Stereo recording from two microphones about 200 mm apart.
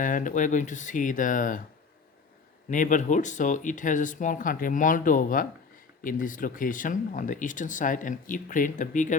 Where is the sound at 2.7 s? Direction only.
40° left (ahead or behind).